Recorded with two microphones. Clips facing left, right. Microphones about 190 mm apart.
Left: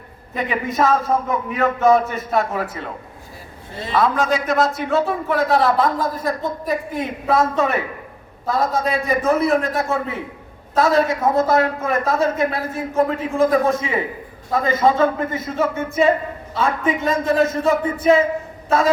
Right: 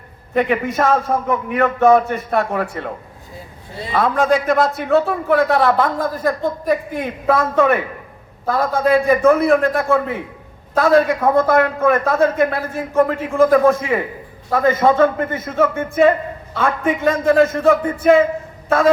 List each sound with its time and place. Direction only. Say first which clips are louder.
0.3 s speech: right 4 dB; 60° right (ahead or behind)
3.9 s a man's voice: right 2 dB; 55° right (ahead or behind)